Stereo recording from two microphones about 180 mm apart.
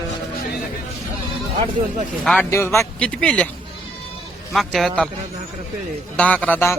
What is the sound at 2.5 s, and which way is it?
Speech, 15° left (ahead or behind).